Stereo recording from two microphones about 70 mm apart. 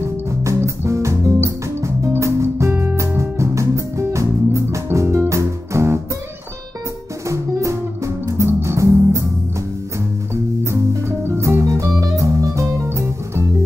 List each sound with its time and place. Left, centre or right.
0.5 s music: right
7.2 s music: right
8.5 s music: right
8.7 s music: right
10.3 s music: right
11.6 s music: right